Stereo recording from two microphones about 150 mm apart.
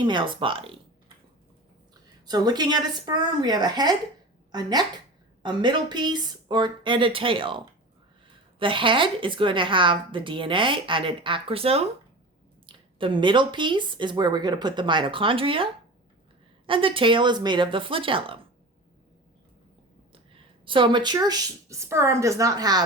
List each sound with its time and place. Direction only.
0.0 s a woman's voice: 30° right (ahead or behind)
2.2 s a woman's voice: 25° right (ahead or behind)
20.1 s speech: 35° right (ahead or behind)